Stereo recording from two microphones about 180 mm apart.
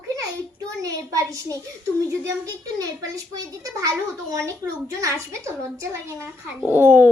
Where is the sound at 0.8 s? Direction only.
20° right (ahead or behind).